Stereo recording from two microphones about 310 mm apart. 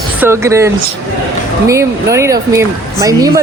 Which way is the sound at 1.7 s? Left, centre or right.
Centre.